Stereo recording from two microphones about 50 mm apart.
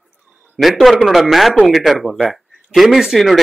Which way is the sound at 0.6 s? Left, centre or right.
Centre.